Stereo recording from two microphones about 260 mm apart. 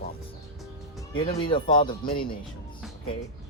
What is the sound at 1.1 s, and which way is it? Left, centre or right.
Speech, centre.